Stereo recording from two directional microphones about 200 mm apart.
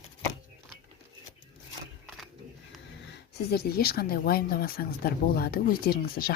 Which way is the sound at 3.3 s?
50° left (ahead or behind).